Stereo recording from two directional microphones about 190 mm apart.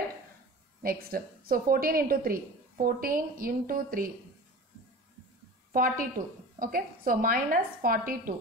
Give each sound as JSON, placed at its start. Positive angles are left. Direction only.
{"t": 0.8, "sound": "a woman's voice", "side_deg": -50}
{"t": 5.7, "sound": "a woman's voice", "side_deg": -45}